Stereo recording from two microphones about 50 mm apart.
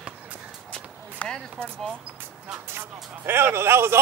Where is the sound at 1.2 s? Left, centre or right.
Left.